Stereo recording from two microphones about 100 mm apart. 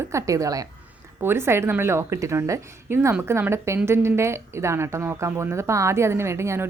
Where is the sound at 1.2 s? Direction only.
25° right (ahead or behind).